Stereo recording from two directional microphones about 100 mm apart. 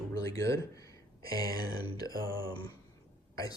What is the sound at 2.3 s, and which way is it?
Speech, 25° right (ahead or behind).